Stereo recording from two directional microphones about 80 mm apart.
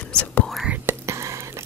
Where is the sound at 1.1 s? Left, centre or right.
Right.